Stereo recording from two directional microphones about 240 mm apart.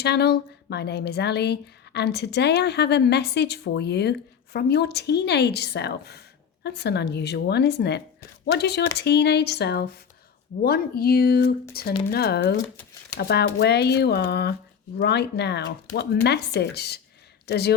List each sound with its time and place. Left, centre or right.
0.0 s a woman's voice: left